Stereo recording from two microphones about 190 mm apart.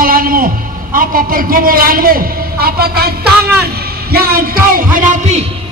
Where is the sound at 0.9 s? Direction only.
50° right (ahead or behind).